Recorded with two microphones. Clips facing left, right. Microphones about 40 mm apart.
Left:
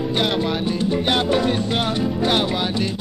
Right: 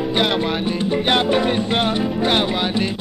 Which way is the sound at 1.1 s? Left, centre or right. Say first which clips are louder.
Right 3 dB; centre.